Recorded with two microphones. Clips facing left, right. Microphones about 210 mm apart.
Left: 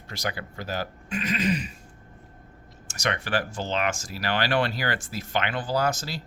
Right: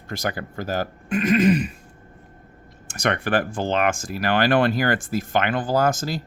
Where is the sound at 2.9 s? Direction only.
55° right (ahead or behind).